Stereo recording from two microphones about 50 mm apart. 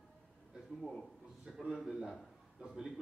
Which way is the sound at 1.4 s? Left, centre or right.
Centre.